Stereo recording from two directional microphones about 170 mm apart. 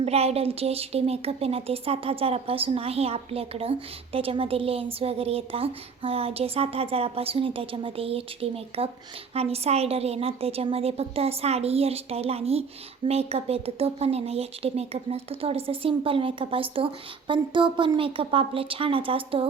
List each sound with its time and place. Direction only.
0.0 s a woman's voice: 35° right (ahead or behind)